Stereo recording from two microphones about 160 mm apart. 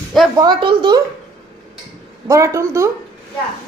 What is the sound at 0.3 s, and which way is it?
Speech, 30° right (ahead or behind).